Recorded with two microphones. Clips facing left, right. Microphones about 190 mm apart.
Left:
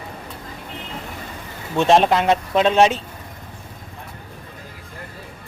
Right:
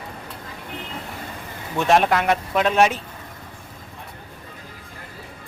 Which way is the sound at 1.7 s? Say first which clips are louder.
Left 3 dB; 25° left (ahead or behind).